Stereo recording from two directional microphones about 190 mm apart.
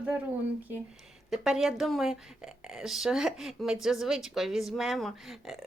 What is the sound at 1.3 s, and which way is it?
A woman's voice, centre (ahead or behind).